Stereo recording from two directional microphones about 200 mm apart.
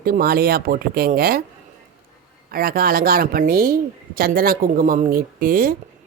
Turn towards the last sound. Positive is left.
turn(degrees=-45)  # may be behind; listen again after turning